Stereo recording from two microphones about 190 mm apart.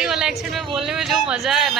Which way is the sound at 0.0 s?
5° right (ahead or behind).